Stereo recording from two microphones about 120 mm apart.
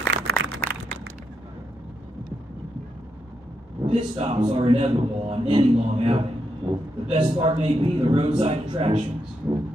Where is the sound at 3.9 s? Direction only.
55° right (ahead or behind).